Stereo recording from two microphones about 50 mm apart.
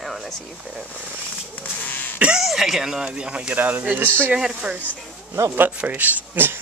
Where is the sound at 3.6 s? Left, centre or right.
Right.